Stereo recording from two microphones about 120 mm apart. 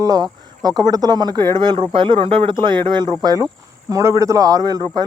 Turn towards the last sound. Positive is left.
turn(degrees=-35)  # may be behind; listen again after turning